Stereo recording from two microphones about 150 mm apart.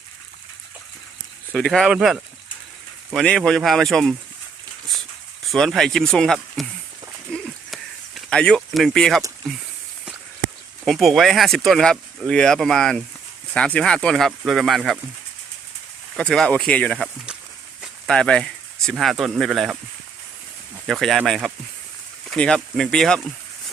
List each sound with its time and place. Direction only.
1.5 s speech: centre (ahead or behind)
5.5 s speech: 5° left (ahead or behind)
7.3 s a sound: centre (ahead or behind)
10.8 s speech: centre (ahead or behind)
16.1 s speech: 5° left (ahead or behind)
17.7 s a sound: centre (ahead or behind)
19.2 s speech: centre (ahead or behind)
20.8 s speech: centre (ahead or behind)